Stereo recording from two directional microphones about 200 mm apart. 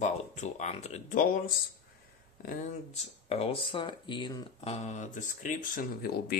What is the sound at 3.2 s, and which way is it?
Speech, 30° left (ahead or behind).